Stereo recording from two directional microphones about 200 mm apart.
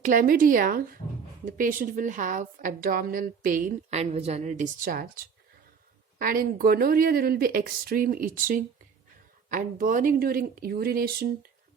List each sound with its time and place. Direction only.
0.0 s a woman's voice: 45° right (ahead or behind)